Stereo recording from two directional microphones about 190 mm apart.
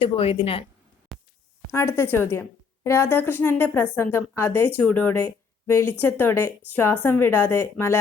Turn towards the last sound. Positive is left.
turn(degrees=10)  # may be behind; listen again after turning